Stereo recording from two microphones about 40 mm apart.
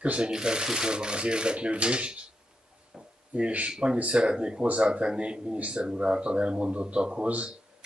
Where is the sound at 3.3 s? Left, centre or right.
Right.